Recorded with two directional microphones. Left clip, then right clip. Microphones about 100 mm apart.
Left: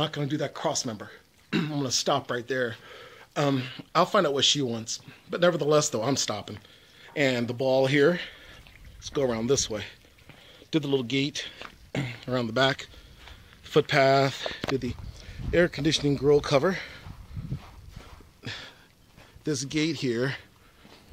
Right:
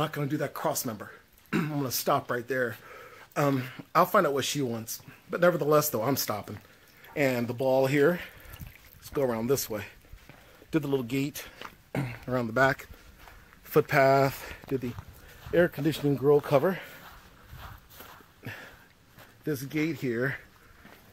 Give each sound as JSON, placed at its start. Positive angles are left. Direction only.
{"t": 0.0, "sound": "speech", "side_deg": 0}
{"t": 7.2, "sound": "speech", "side_deg": 0}
{"t": 7.9, "sound": "speech", "side_deg": 15}
{"t": 11.9, "sound": "speech", "side_deg": -10}
{"t": 14.4, "sound": "speech", "side_deg": 25}
{"t": 15.5, "sound": "speech", "side_deg": 5}
{"t": 16.0, "sound": "speech", "side_deg": -5}
{"t": 16.5, "sound": "speech", "side_deg": 5}
{"t": 19.4, "sound": "speech", "side_deg": 10}
{"t": 20.0, "sound": "speech", "side_deg": 30}